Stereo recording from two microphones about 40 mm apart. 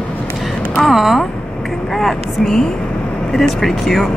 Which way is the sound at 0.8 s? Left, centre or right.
Centre.